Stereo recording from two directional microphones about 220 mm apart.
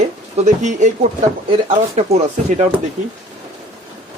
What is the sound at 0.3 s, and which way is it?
Speech, 30° right (ahead or behind).